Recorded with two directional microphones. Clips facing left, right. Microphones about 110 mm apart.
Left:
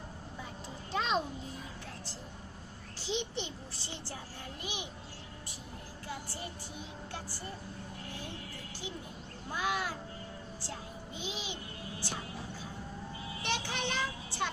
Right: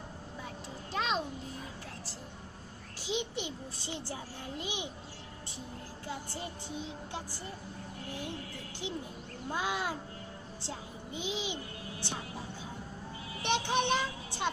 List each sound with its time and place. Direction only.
0.9 s a sound: centre (ahead or behind)
3.0 s a child's voice: 10° right (ahead or behind)
6.1 s speech: 20° right (ahead or behind)
9.5 s a woman's voice: 25° right (ahead or behind)
13.4 s speech: 20° right (ahead or behind)